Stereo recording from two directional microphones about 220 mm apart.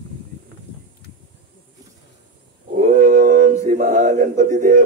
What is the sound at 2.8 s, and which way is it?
Male singing, 35° right (ahead or behind).